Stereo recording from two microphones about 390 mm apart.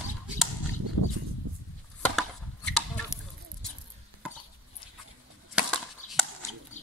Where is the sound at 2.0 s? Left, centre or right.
Centre.